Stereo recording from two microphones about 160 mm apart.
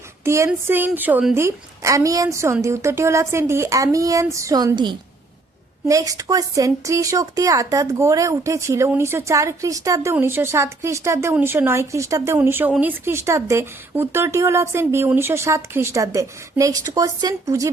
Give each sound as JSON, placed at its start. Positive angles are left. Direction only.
{"t": 0.3, "sound": "speech", "side_deg": -15}